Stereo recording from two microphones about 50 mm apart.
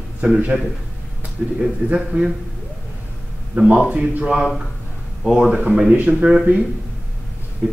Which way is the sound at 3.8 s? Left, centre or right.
Right.